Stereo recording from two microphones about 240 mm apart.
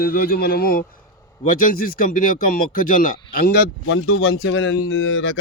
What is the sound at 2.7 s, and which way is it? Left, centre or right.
Speech, left.